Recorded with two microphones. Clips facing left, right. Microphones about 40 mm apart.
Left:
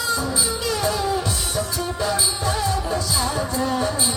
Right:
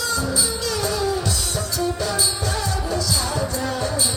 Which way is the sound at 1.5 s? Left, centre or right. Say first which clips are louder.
Right 2 dB; left.